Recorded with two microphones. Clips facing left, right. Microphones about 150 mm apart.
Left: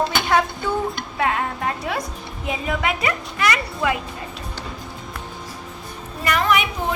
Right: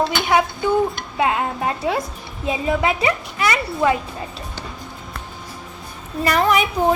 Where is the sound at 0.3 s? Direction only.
10° right (ahead or behind).